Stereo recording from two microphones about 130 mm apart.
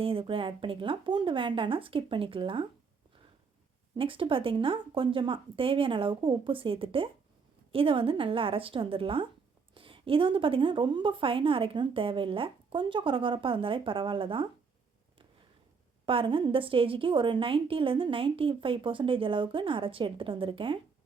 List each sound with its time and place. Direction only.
0.0 s a woman's voice: 45° right (ahead or behind)
3.9 s a woman's voice: 40° right (ahead or behind)
16.0 s a woman's voice: 40° right (ahead or behind)